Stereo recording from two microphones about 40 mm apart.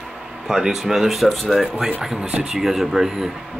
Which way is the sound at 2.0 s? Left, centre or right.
Centre.